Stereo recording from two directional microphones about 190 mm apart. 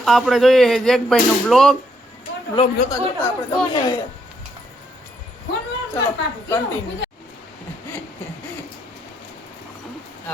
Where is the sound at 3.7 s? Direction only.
20° left (ahead or behind).